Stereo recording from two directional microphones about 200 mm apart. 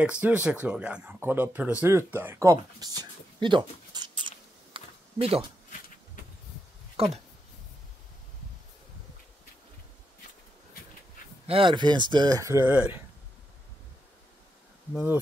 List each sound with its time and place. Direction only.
0.0 s speech: 5° right (ahead or behind); by 4.3 s 25° right (ahead or behind)
4.7 s a sound: 30° right (ahead or behind)
7.0 s speech: 30° right (ahead or behind)
11.4 s speech: 25° right (ahead or behind); by 13.0 s 10° right (ahead or behind)